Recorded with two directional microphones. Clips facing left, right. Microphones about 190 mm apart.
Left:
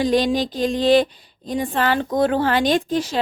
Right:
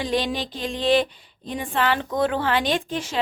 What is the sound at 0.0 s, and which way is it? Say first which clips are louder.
A woman's voice: left 6 dB; 40° left (ahead or behind).